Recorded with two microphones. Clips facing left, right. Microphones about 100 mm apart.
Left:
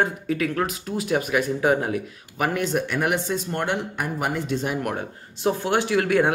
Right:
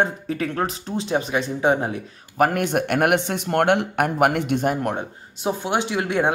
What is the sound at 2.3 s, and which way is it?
Speech, 50° right (ahead or behind).